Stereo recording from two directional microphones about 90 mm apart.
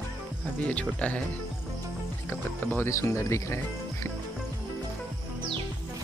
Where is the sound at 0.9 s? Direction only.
15° left (ahead or behind).